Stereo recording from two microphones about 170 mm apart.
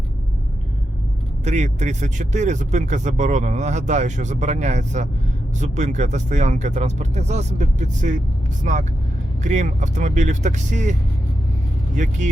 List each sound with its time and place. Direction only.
1.5 s speech: 40° right (ahead or behind)